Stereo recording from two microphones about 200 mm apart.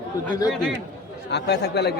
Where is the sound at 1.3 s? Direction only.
55° left (ahead or behind).